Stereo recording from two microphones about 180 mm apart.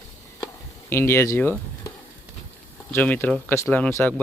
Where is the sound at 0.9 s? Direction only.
15° left (ahead or behind).